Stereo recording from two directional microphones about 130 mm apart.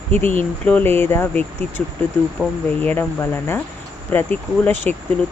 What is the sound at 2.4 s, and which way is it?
Speech, centre (ahead or behind).